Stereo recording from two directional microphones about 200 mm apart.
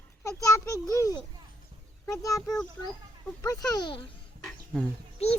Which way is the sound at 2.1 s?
15° left (ahead or behind).